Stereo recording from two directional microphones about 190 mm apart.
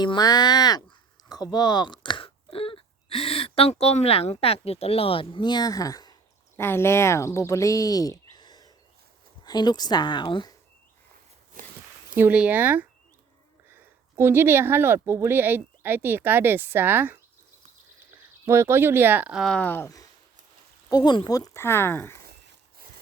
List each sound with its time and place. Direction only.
0.0 s a woman's voice: 20° left (ahead or behind)
12.1 s speech: 10° right (ahead or behind); by 22.2 s 10° left (ahead or behind)